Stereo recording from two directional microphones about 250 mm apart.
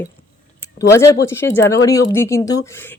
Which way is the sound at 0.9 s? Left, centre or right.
Centre.